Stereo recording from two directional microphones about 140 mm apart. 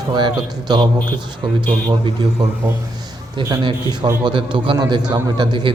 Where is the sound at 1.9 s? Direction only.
30° right (ahead or behind).